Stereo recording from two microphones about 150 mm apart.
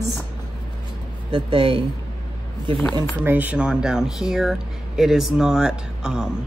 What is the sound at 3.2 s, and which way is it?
Speech, 10° right (ahead or behind).